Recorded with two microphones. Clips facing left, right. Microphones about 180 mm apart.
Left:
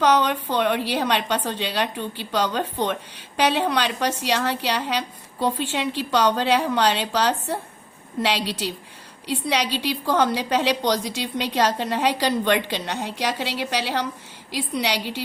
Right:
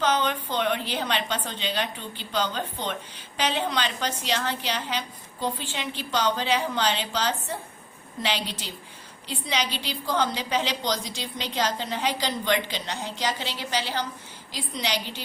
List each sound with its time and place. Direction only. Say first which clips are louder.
0.0 s a woman's voice: left 5 dB; 70° left (ahead or behind)